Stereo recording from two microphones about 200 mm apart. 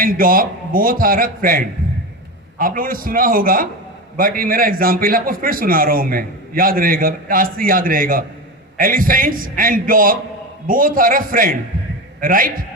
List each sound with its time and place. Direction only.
0.0 s a man's voice: 45° right (ahead or behind)